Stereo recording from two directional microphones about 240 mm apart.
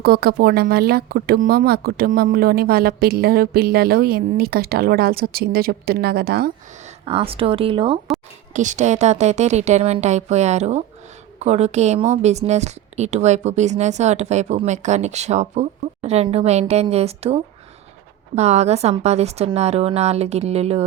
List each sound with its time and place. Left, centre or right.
0.0 s speech: right
7.0 s speech: right